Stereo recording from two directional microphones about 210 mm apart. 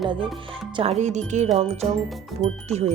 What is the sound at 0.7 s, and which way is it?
Speech, 30° right (ahead or behind).